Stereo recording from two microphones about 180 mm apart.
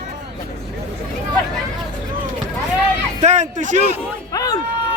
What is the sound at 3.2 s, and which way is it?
Speech, 40° right (ahead or behind).